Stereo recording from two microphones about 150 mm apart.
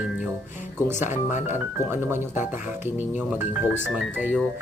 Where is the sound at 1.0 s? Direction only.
55° left (ahead or behind).